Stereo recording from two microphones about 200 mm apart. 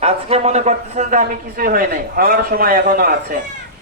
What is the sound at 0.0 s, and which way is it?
A man's voice, 30° right (ahead or behind).